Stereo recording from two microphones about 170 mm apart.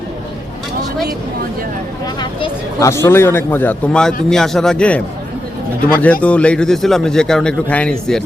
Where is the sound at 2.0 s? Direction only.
25° left (ahead or behind).